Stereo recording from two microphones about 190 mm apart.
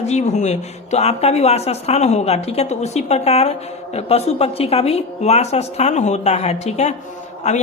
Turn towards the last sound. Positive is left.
turn(degrees=35)  # may be behind; listen again after turning